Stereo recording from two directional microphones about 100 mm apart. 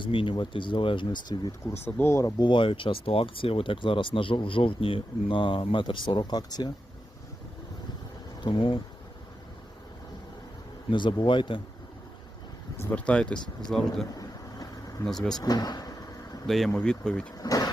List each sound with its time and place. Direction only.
0.0 s speech: 60° left (ahead or behind)
1.8 s speech: 25° left (ahead or behind)
2.2 s speech: 50° left (ahead or behind)
8.4 s speech: 55° left (ahead or behind)
10.9 s speech: 55° left (ahead or behind)
13.1 s speech: 10° left (ahead or behind)
14.2 s boat: 35° left (ahead or behind)
15.0 s speech: 5° left (ahead or behind)
15.4 s vehicle: 40° left (ahead or behind)
16.5 s speech: 5° left (ahead or behind)
17.3 s speech: 40° left (ahead or behind)